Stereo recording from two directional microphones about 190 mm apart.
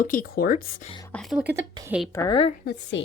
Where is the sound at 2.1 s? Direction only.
15° left (ahead or behind).